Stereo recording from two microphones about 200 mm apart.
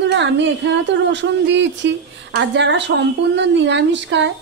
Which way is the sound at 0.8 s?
65° right (ahead or behind).